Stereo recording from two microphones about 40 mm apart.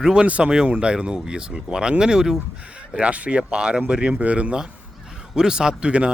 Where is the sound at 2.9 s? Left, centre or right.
Right.